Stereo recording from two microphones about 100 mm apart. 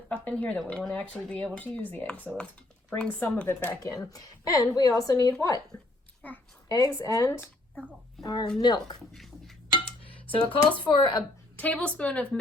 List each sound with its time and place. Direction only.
0.1 s speech: 15° left (ahead or behind)
2.1 s speech: 15° right (ahead or behind)
3.0 s speech: 15° left (ahead or behind)
3.8 s a woman's voice: 35° left (ahead or behind)
6.2 s speech: 15° left (ahead or behind)
6.7 s a woman's voice: 35° left (ahead or behind)
8.2 s speech: 45° left (ahead or behind)
9.1 s a sound: centre (ahead or behind)
9.7 s dishes: 65° left (ahead or behind)
10.5 s speech: 60° left (ahead or behind)
11.5 s speech: 15° left (ahead or behind)